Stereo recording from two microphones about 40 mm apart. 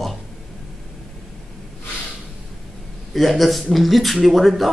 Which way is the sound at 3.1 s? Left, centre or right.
Centre.